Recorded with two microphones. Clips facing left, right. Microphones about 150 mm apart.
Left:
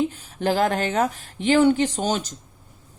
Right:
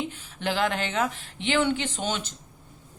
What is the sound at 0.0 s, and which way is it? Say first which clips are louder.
Speech: left 7 dB; 40° left (ahead or behind).